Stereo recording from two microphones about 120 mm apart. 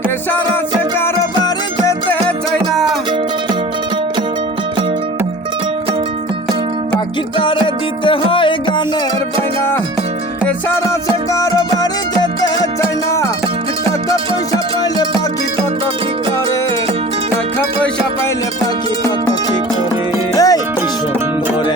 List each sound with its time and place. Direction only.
1.4 s music: 25° left (ahead or behind)
8.0 s music: 45° left (ahead or behind)
11.3 s music: 35° left (ahead or behind)
20.3 s music: 30° left (ahead or behind)